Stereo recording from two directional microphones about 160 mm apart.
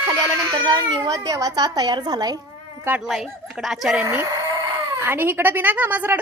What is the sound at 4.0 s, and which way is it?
Speech, 15° right (ahead or behind).